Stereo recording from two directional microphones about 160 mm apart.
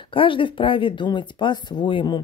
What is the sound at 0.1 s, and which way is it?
Speech, 30° left (ahead or behind).